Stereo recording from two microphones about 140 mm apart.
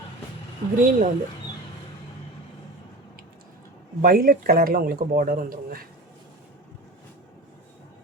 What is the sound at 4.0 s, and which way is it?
Speech, 85° right.